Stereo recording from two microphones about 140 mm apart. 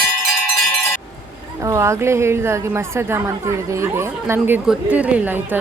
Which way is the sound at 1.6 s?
20° right (ahead or behind).